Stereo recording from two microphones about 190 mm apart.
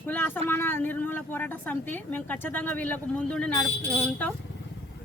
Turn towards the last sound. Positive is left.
turn(degrees=5)  # may be behind; listen again after turning